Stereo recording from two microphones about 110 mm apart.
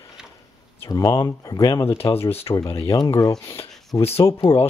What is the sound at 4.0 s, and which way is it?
Speech, 65° left (ahead or behind).